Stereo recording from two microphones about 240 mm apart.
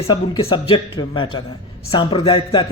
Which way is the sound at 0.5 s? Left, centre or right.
Centre.